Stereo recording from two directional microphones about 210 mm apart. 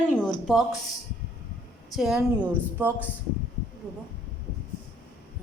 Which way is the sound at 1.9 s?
Centre (ahead or behind).